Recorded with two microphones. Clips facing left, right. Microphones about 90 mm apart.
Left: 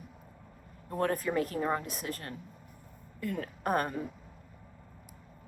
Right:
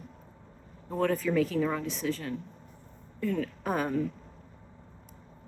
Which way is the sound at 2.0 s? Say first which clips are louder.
Right 7 dB; 50° left (ahead or behind).